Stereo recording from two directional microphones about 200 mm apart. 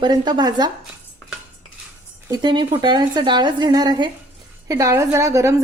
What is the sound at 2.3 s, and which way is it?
A woman's voice, 20° right (ahead or behind).